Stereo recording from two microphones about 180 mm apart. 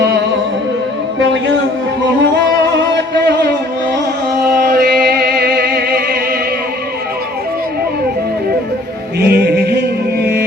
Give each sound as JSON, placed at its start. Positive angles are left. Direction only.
{"t": 2.9, "sound": "music", "side_deg": -70}
{"t": 4.4, "sound": "music", "side_deg": -60}
{"t": 9.2, "sound": "music", "side_deg": -65}